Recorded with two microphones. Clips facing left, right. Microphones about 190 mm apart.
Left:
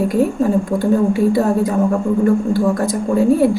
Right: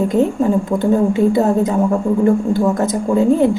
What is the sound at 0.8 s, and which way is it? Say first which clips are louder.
A woman's voice: right 1 dB; 20° right (ahead or behind).